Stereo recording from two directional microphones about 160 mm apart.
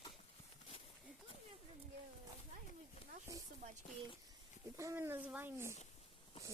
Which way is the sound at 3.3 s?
20° right (ahead or behind).